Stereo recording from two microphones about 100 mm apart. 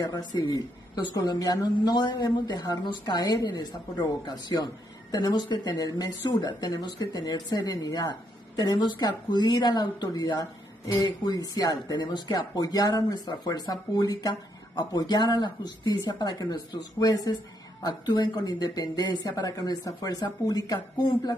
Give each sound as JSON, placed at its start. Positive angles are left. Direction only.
{"t": 0.0, "sound": "a woman's voice", "side_deg": 40}